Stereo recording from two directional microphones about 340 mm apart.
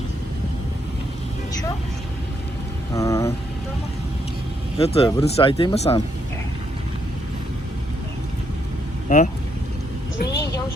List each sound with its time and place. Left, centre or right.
2.9 s vehicle: centre
4.8 s speech: centre
9.0 s speech: left